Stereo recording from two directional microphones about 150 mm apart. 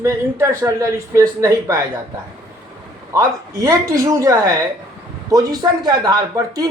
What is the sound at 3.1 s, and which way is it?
A man's voice, 20° right (ahead or behind).